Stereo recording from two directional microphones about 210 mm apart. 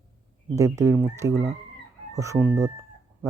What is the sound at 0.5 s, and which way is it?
Speech, 15° right (ahead or behind).